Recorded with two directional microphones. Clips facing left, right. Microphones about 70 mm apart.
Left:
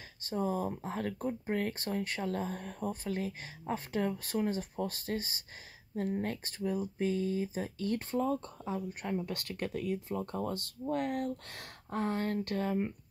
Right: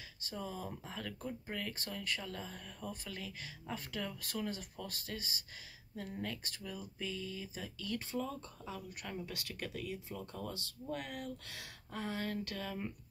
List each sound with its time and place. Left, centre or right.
0.2 s speech: left